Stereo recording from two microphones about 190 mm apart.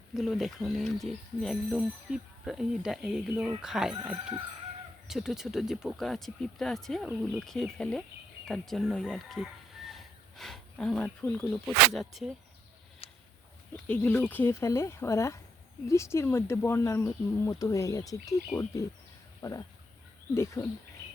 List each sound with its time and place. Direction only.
0.1 s speech: centre (ahead or behind)
13.0 s a sound: 30° left (ahead or behind)
13.7 s speech: 10° left (ahead or behind)
19.4 s speech: 20° left (ahead or behind)